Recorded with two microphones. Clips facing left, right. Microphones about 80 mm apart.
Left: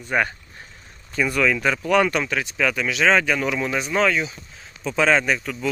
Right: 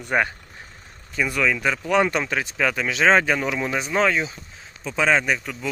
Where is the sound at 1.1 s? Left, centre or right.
Centre.